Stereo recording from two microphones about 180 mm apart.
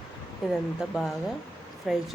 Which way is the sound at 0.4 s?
Centre (ahead or behind).